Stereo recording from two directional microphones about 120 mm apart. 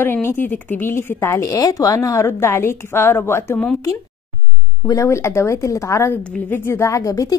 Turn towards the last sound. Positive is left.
turn(degrees=30)  # may be behind; listen again after turning